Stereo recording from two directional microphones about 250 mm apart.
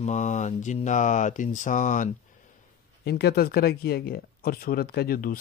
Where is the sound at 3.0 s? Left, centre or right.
Left.